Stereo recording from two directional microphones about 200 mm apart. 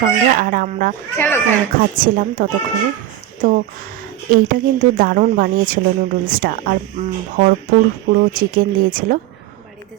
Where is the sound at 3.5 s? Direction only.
45° right (ahead or behind).